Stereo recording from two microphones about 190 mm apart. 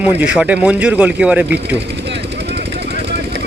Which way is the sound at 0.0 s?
5° right (ahead or behind).